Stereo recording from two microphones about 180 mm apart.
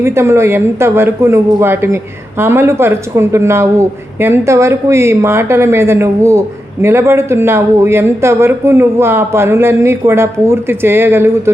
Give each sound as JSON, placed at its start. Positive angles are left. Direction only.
{"t": 0.0, "sound": "speech", "side_deg": -15}